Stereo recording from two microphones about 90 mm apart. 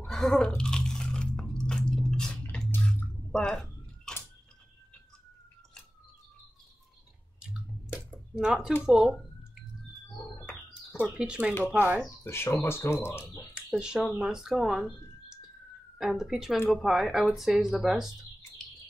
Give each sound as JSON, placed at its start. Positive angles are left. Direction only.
{"t": 0.0, "sound": "a sound", "side_deg": 5}
{"t": 0.6, "sound": "biting", "side_deg": 5}
{"t": 3.3, "sound": "a sound", "side_deg": 10}
{"t": 8.4, "sound": "speech", "side_deg": -10}
{"t": 11.0, "sound": "speech", "side_deg": -10}
{"t": 12.2, "sound": "speech", "side_deg": 30}
{"t": 13.6, "sound": "speech", "side_deg": -10}